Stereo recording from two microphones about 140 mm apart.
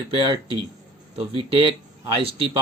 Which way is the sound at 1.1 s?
40° right (ahead or behind).